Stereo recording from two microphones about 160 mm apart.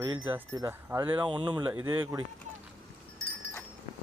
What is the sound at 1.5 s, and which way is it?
Speech, 10° right (ahead or behind).